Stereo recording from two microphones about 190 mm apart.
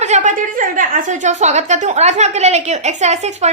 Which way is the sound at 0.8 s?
40° right (ahead or behind).